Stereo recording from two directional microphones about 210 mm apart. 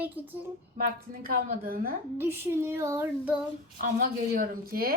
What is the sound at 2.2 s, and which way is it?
Child singing, 10° right (ahead or behind).